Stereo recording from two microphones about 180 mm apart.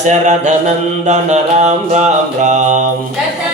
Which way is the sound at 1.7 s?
40° right (ahead or behind).